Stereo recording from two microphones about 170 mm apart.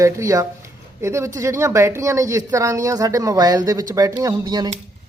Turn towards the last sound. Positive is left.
turn(degrees=-25)  # may be behind; listen again after turning